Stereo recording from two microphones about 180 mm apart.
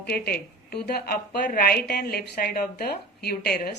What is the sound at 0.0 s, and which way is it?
A woman's voice, 60° left (ahead or behind).